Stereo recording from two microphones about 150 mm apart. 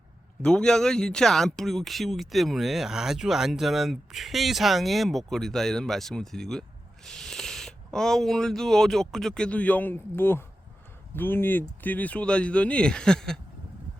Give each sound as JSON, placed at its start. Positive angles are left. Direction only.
{"t": 0.4, "sound": "speech", "side_deg": 5}